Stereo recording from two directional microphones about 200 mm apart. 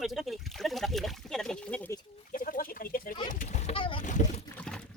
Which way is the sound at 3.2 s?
40° left (ahead or behind).